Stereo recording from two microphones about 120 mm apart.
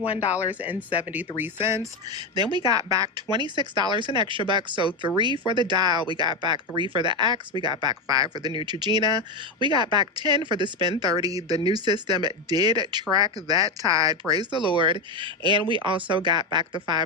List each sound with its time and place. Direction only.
0.0 s speech: 60° left (ahead or behind)
0.9 s speech: 15° right (ahead or behind)
2.1 s speech: 35° right (ahead or behind)